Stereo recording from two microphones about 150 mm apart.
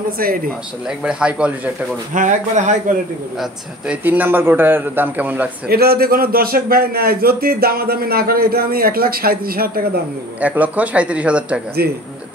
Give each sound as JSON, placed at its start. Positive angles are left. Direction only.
{"t": 0.8, "sound": "a man's voice", "side_deg": -5}
{"t": 2.1, "sound": "speech", "side_deg": -55}
{"t": 3.3, "sound": "a man's voice", "side_deg": -5}
{"t": 5.7, "sound": "a man's voice", "side_deg": -90}
{"t": 10.4, "sound": "a man's voice", "side_deg": -10}